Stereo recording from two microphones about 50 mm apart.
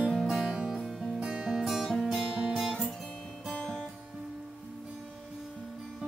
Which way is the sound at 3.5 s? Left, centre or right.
Centre.